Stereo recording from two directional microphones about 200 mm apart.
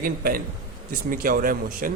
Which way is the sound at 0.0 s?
45° right (ahead or behind).